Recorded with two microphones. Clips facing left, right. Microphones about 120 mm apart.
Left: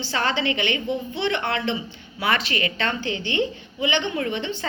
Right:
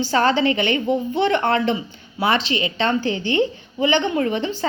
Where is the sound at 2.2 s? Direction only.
30° right (ahead or behind).